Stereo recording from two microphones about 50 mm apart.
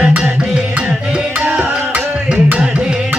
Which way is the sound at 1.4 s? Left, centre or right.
Right.